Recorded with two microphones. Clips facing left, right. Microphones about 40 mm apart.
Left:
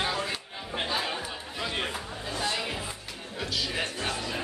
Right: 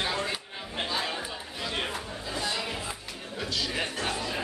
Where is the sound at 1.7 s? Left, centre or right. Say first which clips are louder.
Right 1 dB; centre.